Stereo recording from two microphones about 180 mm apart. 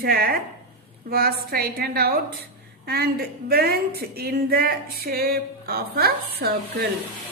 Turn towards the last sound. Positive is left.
turn(degrees=-60)  # may be behind; listen again after turning